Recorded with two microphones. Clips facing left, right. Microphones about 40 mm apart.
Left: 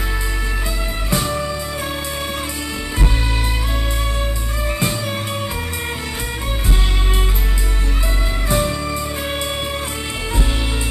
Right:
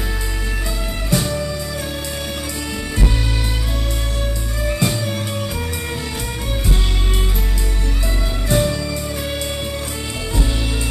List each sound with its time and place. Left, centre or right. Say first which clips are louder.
1.1 s music: even; centre
4.6 s music: right 1 dB; centre
8.5 s music: right 1 dB; centre